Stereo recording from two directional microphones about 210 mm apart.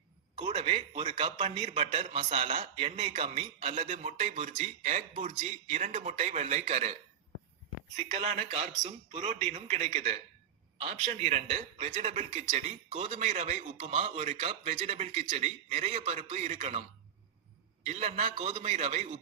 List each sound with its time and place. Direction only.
0.3 s a man's voice: 25° right (ahead or behind)
7.9 s a man's voice: 30° right (ahead or behind)
17.8 s a man's voice: 30° right (ahead or behind)